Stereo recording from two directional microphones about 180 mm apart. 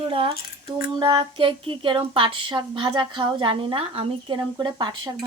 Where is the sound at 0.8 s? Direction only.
20° right (ahead or behind).